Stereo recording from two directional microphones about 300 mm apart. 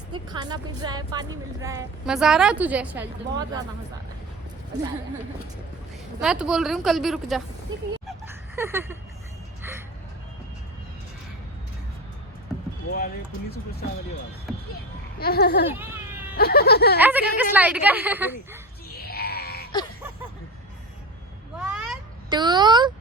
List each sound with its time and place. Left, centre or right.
0.3 s a woman's voice: centre
6.1 s a woman's voice: centre
8.0 s a sound: centre
15.2 s speech: left
17.0 s a woman's voice: centre
18.9 s groan: left
21.6 s a sound: centre
22.3 s a woman's voice: centre